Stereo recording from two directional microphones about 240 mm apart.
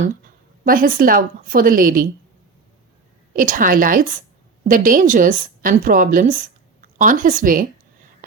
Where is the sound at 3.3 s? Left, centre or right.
Right.